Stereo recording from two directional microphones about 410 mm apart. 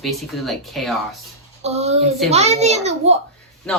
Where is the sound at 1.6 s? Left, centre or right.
Centre.